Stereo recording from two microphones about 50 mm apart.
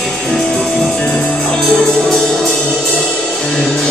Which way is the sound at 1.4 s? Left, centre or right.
Centre.